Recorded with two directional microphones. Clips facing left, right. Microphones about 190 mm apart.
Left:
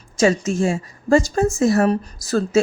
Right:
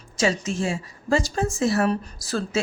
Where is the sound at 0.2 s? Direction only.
45° left (ahead or behind).